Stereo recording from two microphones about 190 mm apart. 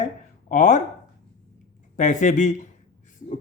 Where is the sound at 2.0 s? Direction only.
40° left (ahead or behind).